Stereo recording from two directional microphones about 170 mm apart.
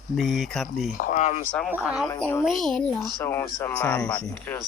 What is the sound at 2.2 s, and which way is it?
Speech, 15° left (ahead or behind).